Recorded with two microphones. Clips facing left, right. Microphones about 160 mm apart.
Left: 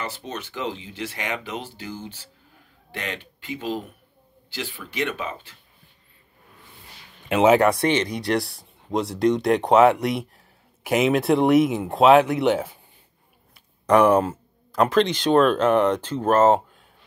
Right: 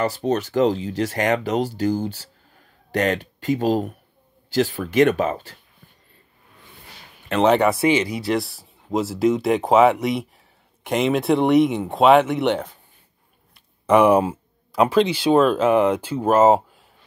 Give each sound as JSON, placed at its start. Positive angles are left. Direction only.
{"t": 0.0, "sound": "speech", "side_deg": -40}
{"t": 7.2, "sound": "speech", "side_deg": 5}
{"t": 13.8, "sound": "speech", "side_deg": -5}